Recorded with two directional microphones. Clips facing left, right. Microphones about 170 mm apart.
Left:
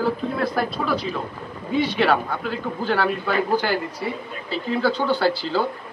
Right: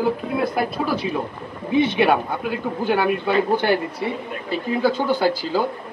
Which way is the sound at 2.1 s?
15° right (ahead or behind).